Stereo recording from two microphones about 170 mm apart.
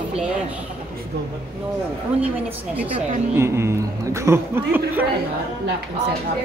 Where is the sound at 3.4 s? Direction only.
15° right (ahead or behind).